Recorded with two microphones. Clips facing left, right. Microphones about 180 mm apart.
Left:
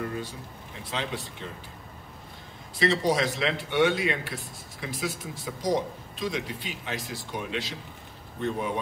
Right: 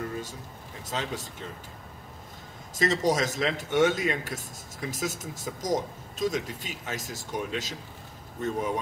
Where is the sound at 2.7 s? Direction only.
45° right (ahead or behind).